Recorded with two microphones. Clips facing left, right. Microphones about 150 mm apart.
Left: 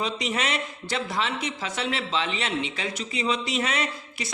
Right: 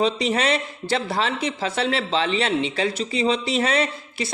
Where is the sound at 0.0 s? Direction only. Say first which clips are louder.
Right 7 dB; 30° right (ahead or behind).